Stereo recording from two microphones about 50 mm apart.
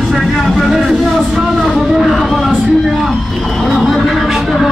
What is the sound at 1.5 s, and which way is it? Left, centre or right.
Music, centre.